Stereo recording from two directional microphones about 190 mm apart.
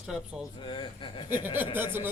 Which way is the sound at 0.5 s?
25° left (ahead or behind).